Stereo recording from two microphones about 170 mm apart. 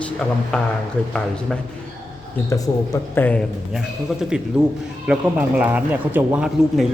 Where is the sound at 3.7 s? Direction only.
5° right (ahead or behind).